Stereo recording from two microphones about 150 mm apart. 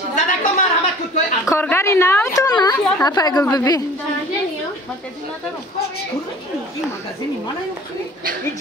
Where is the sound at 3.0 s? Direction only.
25° left (ahead or behind).